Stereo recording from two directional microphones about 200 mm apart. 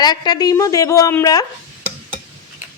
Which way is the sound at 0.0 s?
20° left (ahead or behind).